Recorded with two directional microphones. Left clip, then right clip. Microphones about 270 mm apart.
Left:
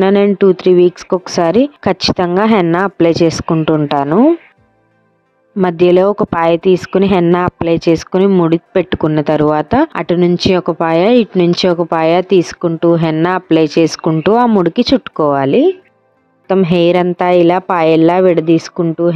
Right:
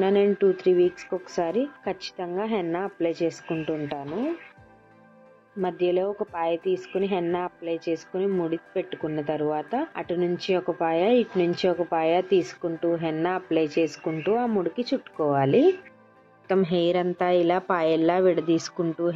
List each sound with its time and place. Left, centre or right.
0.0 s speech: left
5.6 s speech: left